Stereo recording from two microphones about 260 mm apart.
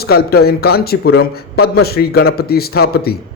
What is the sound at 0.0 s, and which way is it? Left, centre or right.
A man's voice, left.